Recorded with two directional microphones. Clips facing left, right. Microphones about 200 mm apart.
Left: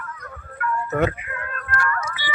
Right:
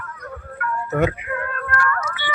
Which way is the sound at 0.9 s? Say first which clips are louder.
Right 2 dB; 10° right (ahead or behind).